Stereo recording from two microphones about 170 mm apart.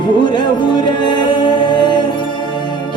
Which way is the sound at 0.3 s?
25° left (ahead or behind).